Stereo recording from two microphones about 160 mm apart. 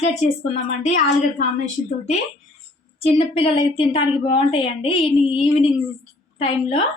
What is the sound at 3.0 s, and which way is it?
A woman's voice, 35° left (ahead or behind).